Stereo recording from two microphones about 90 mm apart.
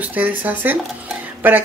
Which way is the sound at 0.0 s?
20° right (ahead or behind).